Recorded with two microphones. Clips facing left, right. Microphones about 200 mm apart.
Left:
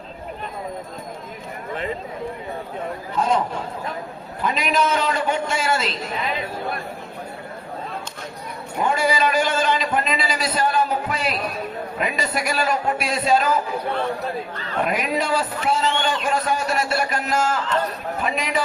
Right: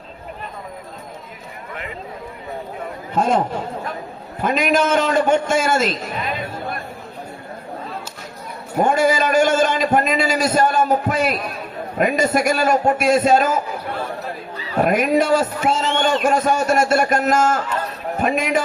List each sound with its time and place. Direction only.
3.2 s a man's voice: 50° right (ahead or behind)
8.8 s a man's voice: 50° right (ahead or behind)
14.5 s speech: 10° right (ahead or behind)
14.8 s a man's voice: 50° right (ahead or behind)